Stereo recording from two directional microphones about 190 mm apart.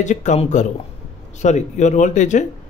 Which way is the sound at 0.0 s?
40° left (ahead or behind).